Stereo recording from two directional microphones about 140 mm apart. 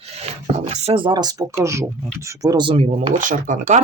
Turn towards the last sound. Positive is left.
turn(degrees=-60)  # may be behind; listen again after turning